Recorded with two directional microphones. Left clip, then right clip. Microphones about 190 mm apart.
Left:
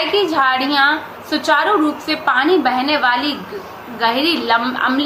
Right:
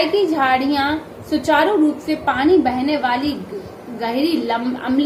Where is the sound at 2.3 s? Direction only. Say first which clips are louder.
Left 1 dB; 10° right (ahead or behind).